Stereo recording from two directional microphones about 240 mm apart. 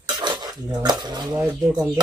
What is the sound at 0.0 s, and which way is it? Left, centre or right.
Cutlery, centre.